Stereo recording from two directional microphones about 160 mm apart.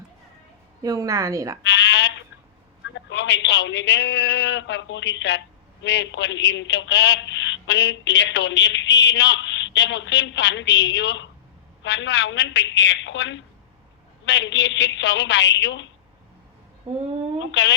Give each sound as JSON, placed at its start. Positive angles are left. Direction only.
{"t": 0.8, "sound": "a woman's voice", "side_deg": -20}
{"t": 1.6, "sound": "sheep", "side_deg": 90}
{"t": 2.9, "sound": "a woman's voice", "side_deg": 90}
{"t": 14.3, "sound": "a woman's voice", "side_deg": 90}
{"t": 17.5, "sound": "a woman's voice", "side_deg": 90}